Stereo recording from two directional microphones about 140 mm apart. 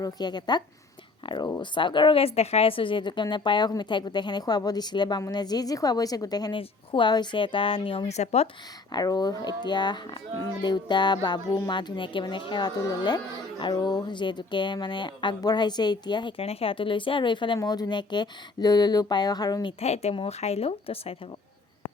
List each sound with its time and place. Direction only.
0.0 s speech: 30° left (ahead or behind); by 8.4 s 50° left (ahead or behind)
8.9 s speech: 30° left (ahead or behind)
19.8 s speech: 50° left (ahead or behind)